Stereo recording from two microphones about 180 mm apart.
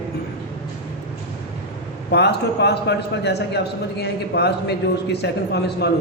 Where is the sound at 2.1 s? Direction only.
70° left (ahead or behind).